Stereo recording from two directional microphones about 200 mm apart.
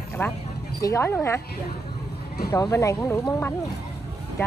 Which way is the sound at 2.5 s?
15° left (ahead or behind).